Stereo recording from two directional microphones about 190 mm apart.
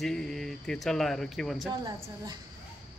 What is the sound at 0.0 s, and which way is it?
A man's voice, centre (ahead or behind).